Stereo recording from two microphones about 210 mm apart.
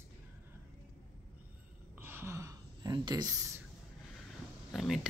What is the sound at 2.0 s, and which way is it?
Speech, 10° right (ahead or behind).